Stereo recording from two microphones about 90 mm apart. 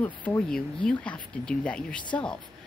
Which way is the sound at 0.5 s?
10° left (ahead or behind).